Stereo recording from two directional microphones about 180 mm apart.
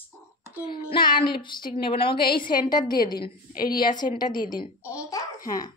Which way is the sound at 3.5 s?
55° left (ahead or behind).